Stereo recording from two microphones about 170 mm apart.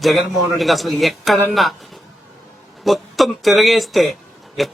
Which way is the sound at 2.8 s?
Centre (ahead or behind).